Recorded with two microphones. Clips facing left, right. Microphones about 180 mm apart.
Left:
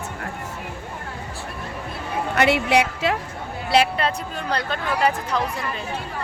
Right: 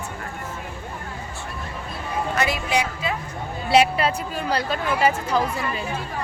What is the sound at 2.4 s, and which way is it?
Speech, 70° left (ahead or behind).